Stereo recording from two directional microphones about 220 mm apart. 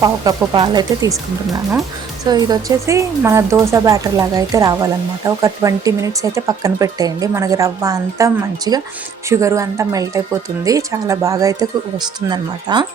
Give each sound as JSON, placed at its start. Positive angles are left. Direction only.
{"t": 0.0, "sound": "speech", "side_deg": -15}
{"t": 2.2, "sound": "speech", "side_deg": -20}